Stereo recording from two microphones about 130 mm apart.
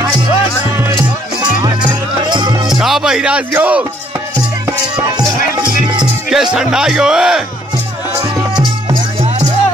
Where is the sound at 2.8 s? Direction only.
5° right (ahead or behind).